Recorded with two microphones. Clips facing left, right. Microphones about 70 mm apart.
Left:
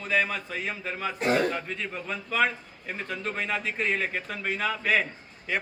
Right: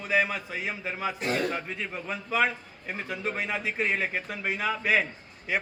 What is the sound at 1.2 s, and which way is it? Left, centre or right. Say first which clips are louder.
Speech: left 6 dB; left.